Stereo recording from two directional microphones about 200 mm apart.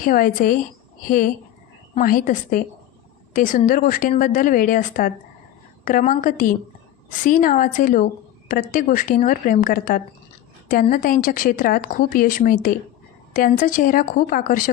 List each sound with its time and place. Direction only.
0.0 s a woman's voice: 45° left (ahead or behind)